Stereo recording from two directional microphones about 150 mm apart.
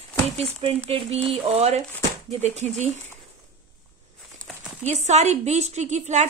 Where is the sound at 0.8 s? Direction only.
45° right (ahead or behind).